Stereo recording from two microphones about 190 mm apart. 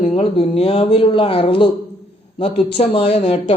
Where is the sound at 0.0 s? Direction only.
35° left (ahead or behind).